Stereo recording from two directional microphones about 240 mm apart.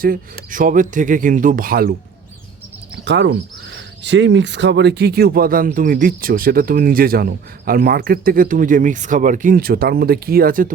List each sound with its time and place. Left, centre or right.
0.0 s speech: right
3.0 s speech: right